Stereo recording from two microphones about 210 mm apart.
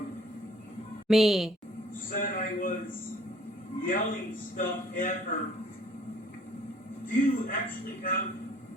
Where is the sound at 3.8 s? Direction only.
40° left (ahead or behind).